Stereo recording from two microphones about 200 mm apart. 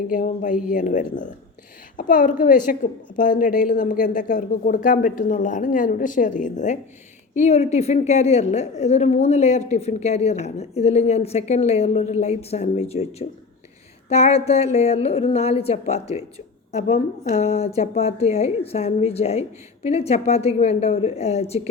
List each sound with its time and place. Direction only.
0.1 s a woman's voice: 40° left (ahead or behind)